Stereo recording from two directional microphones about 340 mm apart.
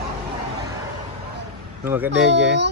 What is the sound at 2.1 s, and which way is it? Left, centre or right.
Speech, right.